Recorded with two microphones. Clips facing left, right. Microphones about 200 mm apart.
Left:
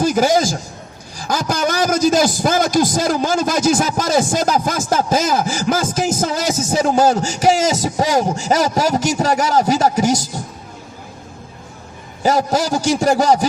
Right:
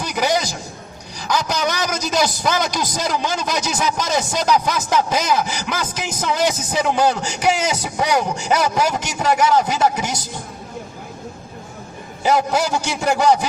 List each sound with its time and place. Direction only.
0.0 s a man's voice: 45° left (ahead or behind)
12.2 s a man's voice: 40° left (ahead or behind)